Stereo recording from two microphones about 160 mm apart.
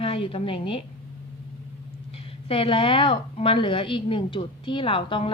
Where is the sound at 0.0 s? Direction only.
35° left (ahead or behind).